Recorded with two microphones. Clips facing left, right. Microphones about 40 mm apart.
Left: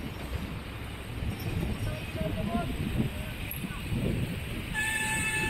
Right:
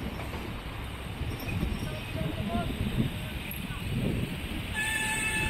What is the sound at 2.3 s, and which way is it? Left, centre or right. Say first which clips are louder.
Vehicle: left 1 dB; right.